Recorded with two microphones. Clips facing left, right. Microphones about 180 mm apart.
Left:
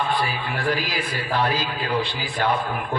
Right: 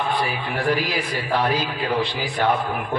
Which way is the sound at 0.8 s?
60° right (ahead or behind).